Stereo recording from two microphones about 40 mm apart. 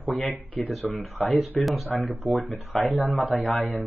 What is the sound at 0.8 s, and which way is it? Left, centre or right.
Speech, left.